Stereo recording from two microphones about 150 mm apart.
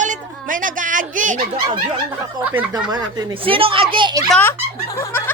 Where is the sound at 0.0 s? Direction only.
60° right (ahead or behind).